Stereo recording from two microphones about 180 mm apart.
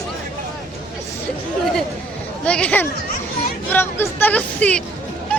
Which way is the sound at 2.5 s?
5° left (ahead or behind).